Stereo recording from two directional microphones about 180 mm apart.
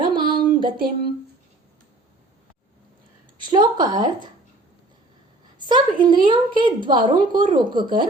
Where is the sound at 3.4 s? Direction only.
25° right (ahead or behind).